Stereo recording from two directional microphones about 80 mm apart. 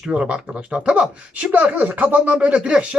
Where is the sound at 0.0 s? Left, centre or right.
Centre.